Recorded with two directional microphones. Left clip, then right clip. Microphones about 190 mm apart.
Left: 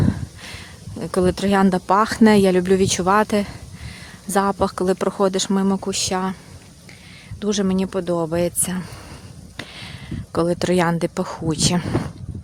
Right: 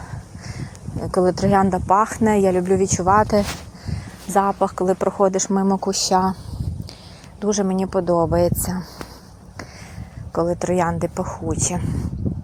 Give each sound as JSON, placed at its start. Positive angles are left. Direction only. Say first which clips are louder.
{"t": 0.4, "sound": "a sound", "louder": "right 2 dB", "side_deg": 40}
{"t": 1.6, "sound": "a woman's voice", "louder": "even", "side_deg": 40}
{"t": 7.4, "sound": "a woman's voice", "louder": "right 1 dB", "side_deg": 25}
{"t": 10.3, "sound": "speech", "louder": "left 1 dB", "side_deg": 40}